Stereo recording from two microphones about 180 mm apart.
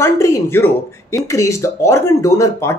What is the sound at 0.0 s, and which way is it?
Speech, 15° left (ahead or behind).